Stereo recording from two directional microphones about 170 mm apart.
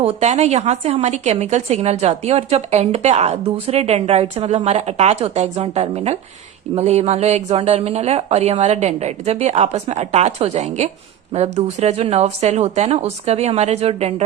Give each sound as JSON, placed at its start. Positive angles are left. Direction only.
{"t": 0.0, "sound": "a woman's voice", "side_deg": -40}